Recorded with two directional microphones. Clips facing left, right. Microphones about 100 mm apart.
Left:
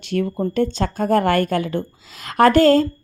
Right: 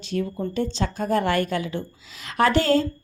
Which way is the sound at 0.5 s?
50° left (ahead or behind).